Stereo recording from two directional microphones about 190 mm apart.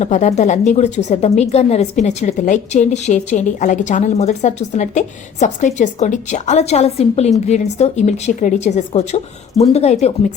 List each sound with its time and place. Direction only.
0.0 s a woman's voice: 40° left (ahead or behind)